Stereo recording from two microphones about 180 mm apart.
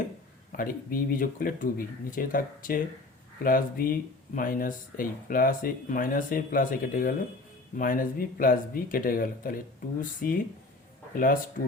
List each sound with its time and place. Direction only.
0.5 s speech: 50° left (ahead or behind)